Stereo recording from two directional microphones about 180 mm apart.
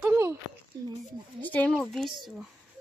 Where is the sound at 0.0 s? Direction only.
15° right (ahead or behind).